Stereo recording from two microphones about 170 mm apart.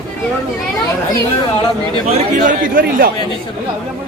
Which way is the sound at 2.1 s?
55° right (ahead or behind).